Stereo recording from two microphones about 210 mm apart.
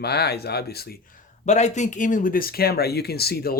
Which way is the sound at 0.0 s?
50° left (ahead or behind).